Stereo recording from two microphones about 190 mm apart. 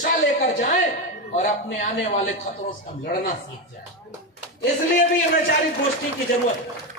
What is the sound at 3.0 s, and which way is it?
Speech, 50° left (ahead or behind).